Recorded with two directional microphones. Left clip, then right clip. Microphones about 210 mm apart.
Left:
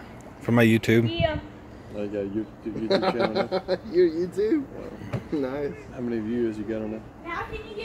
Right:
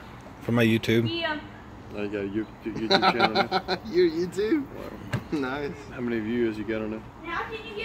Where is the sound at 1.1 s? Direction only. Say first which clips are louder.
Left 3 dB; 55° right (ahead or behind).